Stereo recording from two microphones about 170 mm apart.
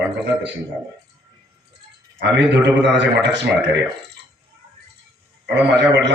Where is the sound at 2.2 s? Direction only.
90° right.